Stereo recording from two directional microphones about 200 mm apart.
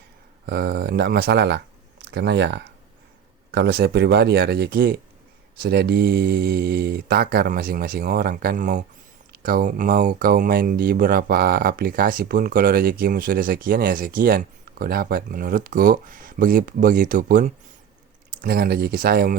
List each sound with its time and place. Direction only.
0.4 s speech: 55° right (ahead or behind)
18.4 s speech: 50° right (ahead or behind)